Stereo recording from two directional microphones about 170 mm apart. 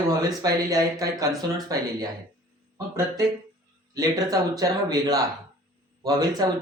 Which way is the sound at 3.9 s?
20° right (ahead or behind).